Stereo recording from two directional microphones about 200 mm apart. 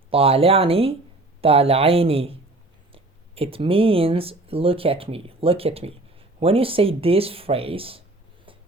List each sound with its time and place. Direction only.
0.1 s speech: 30° right (ahead or behind)